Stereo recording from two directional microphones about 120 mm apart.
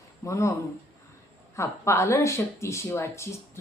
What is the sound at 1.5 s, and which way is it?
Speech, 25° left (ahead or behind).